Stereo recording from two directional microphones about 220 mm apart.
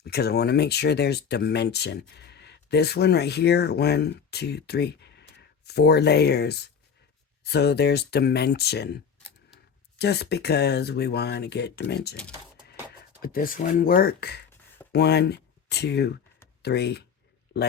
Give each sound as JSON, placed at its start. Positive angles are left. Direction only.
{"t": 0.0, "sound": "speech", "side_deg": 45}
{"t": 10.0, "sound": "speech", "side_deg": 50}